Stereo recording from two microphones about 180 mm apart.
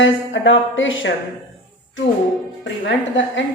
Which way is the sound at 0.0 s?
90° left.